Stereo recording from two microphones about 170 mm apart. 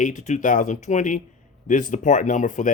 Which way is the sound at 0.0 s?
45° left (ahead or behind).